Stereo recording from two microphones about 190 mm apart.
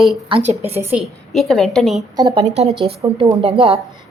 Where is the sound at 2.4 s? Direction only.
35° right (ahead or behind).